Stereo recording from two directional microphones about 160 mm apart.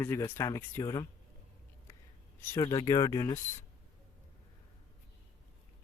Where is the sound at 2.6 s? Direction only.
25° left (ahead or behind).